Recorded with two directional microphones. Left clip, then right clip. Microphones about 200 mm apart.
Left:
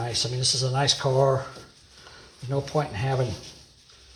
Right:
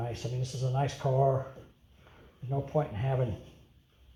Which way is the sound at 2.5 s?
45° left (ahead or behind).